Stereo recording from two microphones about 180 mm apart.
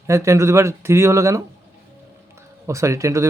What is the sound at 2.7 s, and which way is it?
Speech, 15° right (ahead or behind).